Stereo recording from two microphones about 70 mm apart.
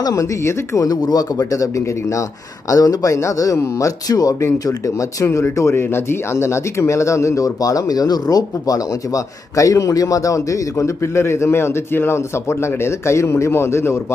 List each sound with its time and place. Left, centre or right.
0.0 s speech: left
0.4 s speech: left
0.8 s speech: left
2.7 s speech: left
5.2 s speech: left